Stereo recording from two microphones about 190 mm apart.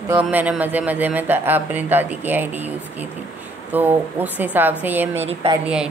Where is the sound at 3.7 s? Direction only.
10° right (ahead or behind).